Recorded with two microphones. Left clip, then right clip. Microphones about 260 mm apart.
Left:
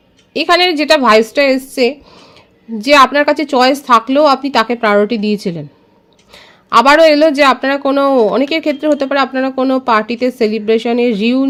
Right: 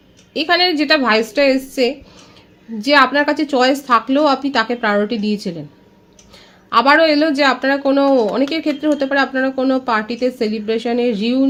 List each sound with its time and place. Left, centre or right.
0.3 s a woman's voice: left